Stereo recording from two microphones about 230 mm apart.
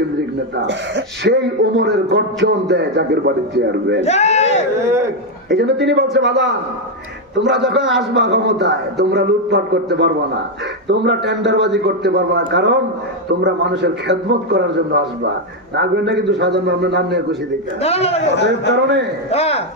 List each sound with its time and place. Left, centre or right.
0.7 s a man's voice: right
4.0 s speech: left
4.8 s a man's voice: centre
5.5 s a man's voice: right
17.7 s speech: left
18.3 s a man's voice: left
19.3 s speech: left